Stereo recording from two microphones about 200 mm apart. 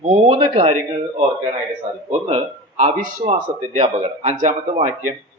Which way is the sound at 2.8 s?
40° right (ahead or behind).